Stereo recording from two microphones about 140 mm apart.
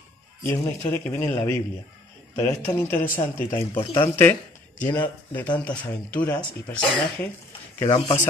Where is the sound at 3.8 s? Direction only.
35° left (ahead or behind).